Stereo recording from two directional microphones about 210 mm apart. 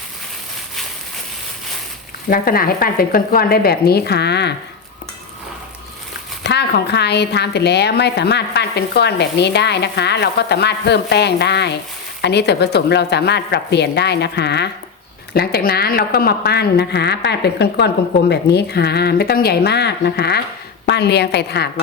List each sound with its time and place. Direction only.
2.3 s a woman's voice: 45° left (ahead or behind)
6.4 s a woman's voice: 55° left (ahead or behind)